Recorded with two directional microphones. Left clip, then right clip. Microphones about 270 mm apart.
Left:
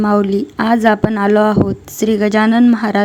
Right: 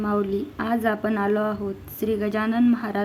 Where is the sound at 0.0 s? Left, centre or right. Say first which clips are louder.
Left 10 dB; left.